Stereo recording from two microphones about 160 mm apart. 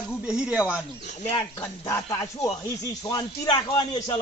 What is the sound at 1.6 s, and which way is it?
A man's voice, 20° left (ahead or behind).